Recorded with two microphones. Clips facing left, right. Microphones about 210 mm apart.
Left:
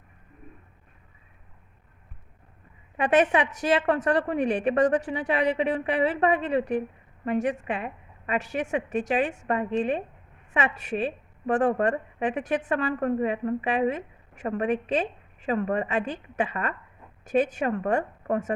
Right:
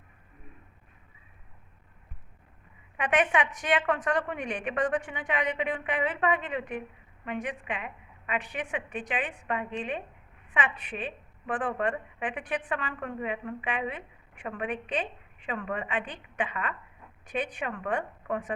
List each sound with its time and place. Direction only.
3.0 s a woman's voice: 35° left (ahead or behind)